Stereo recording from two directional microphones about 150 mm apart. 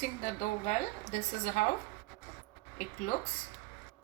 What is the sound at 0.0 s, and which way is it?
A woman's voice, 60° left (ahead or behind).